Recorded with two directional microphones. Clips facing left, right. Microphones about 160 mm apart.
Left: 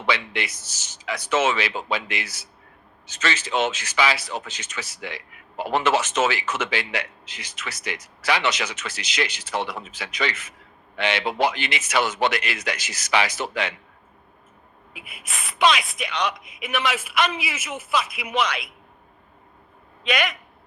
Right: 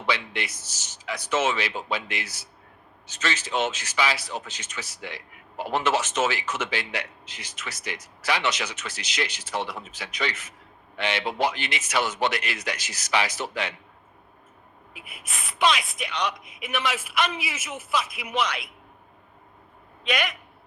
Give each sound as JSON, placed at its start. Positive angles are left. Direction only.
{"t": 0.1, "sound": "speech", "side_deg": 90}
{"t": 14.9, "sound": "speech", "side_deg": 90}
{"t": 20.1, "sound": "speech", "side_deg": 90}